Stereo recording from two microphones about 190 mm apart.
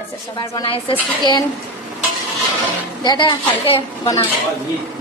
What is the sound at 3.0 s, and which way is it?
A woman's voice, 25° left (ahead or behind).